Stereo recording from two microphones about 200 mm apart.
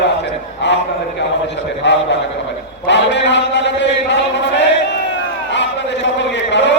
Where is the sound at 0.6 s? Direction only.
60° left (ahead or behind).